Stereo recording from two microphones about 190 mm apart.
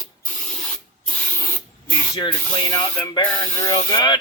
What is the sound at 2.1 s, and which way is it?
Speech, 20° left (ahead or behind).